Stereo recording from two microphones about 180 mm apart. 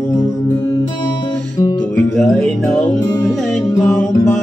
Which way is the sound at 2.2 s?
5° left (ahead or behind).